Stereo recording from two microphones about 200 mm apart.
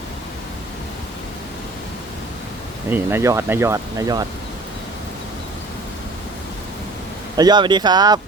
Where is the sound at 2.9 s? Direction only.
10° right (ahead or behind).